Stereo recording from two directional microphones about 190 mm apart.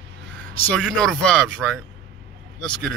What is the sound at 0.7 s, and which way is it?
Speech, 5° left (ahead or behind).